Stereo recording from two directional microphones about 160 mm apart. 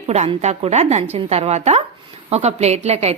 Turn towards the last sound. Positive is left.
turn(degrees=-40)  # may be behind; listen again after turning